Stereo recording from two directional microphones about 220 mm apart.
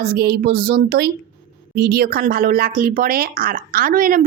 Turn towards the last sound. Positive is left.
turn(degrees=-40)  # may be behind; listen again after turning